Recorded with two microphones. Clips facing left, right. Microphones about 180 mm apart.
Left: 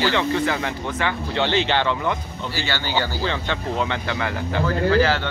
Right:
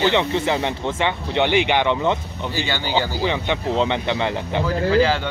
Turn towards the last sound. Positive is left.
turn(degrees=-15)  # may be behind; listen again after turning